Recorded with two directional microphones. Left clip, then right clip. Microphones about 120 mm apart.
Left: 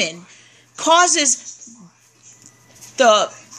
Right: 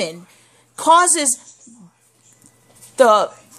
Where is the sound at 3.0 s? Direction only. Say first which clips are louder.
Right 1 dB; 35° right (ahead or behind).